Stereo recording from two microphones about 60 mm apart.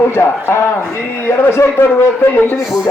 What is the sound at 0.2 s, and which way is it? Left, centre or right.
A man's voice, left.